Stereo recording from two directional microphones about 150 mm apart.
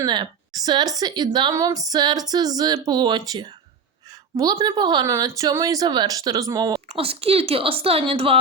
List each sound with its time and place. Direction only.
0.0 s a woman's voice: 30° right (ahead or behind)
4.5 s a woman's voice: 30° right (ahead or behind)
6.8 s speech: 40° right (ahead or behind)